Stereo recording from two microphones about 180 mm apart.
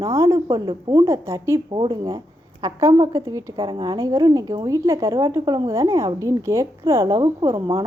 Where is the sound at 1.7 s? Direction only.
25° right (ahead or behind).